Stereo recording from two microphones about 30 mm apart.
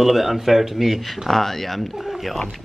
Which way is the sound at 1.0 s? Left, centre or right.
Centre.